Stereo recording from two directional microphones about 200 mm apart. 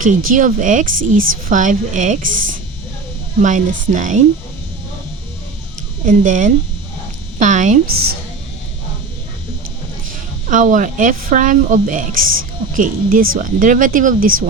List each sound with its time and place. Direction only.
0.3 s speech: 40° right (ahead or behind)
3.4 s speech: 40° right (ahead or behind)
6.1 s speech: 40° right (ahead or behind)
10.5 s speech: 40° right (ahead or behind)